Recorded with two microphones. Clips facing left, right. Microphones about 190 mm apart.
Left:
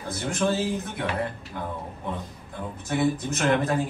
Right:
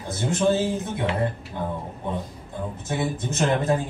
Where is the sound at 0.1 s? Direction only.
25° right (ahead or behind).